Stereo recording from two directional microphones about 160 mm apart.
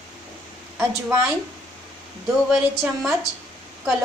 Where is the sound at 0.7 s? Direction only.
10° right (ahead or behind).